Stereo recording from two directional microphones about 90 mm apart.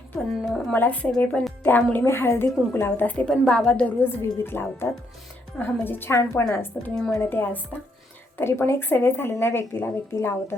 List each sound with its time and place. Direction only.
0.2 s a woman's voice: centre (ahead or behind)
0.7 s a woman's voice: 15° left (ahead or behind)
3.2 s a woman's voice: 10° left (ahead or behind)
4.0 s speech: 25° left (ahead or behind)
6.9 s a woman's voice: 5° left (ahead or behind)
7.2 s speech: 25° left (ahead or behind)